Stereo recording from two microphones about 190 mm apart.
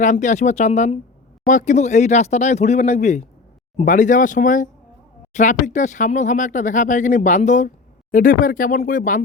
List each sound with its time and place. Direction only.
0.0 s speech: 40° left (ahead or behind)